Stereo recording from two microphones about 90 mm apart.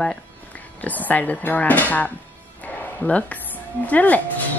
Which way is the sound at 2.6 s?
20° left (ahead or behind).